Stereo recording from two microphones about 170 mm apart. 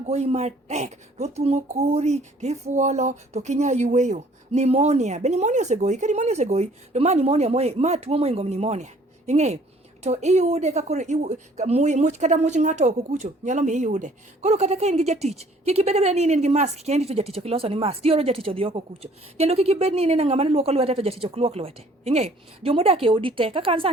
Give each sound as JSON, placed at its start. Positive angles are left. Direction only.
{"t": 0.1, "sound": "speech", "side_deg": -40}